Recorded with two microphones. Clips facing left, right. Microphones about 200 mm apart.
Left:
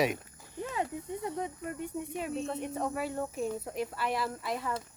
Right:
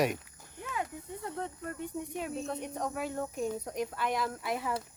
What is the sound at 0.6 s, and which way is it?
Snake, 30° left (ahead or behind).